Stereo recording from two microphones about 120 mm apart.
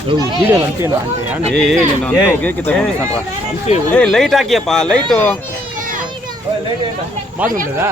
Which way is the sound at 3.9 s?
5° left (ahead or behind).